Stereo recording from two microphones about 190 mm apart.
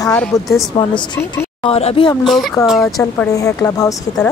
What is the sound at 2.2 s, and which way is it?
Speech, centre (ahead or behind).